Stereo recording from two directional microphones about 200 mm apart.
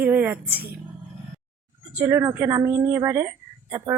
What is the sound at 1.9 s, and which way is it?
Speech, 10° right (ahead or behind).